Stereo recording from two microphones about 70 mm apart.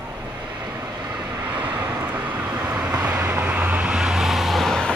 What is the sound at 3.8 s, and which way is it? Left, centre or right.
Vehicle, centre.